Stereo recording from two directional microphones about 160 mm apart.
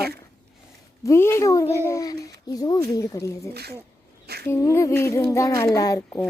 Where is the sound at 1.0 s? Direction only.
15° left (ahead or behind).